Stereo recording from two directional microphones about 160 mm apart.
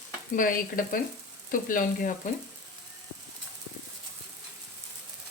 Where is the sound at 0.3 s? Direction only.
60° left (ahead or behind).